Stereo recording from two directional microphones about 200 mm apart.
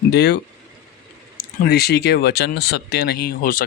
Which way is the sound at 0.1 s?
55° left (ahead or behind).